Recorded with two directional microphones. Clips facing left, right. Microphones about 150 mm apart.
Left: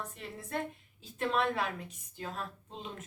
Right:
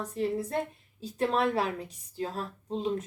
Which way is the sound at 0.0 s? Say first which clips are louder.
Right 13 dB; 35° right (ahead or behind).